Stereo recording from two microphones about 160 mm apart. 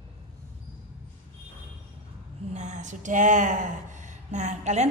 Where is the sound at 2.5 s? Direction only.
50° right (ahead or behind).